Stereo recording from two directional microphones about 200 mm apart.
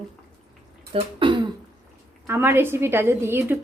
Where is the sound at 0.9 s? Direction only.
25° right (ahead or behind).